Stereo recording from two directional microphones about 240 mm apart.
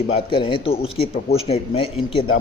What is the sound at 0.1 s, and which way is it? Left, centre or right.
Speech, left.